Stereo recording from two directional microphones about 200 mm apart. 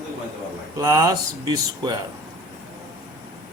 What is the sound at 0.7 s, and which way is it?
Speech, 15° right (ahead or behind).